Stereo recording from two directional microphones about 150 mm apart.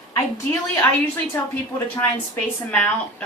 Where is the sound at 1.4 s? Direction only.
15° left (ahead or behind).